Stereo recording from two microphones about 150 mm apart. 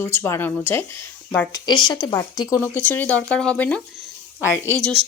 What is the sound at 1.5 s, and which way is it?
A woman's voice, 30° left (ahead or behind).